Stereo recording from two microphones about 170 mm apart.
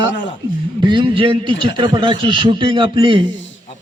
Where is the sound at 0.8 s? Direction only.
25° right (ahead or behind).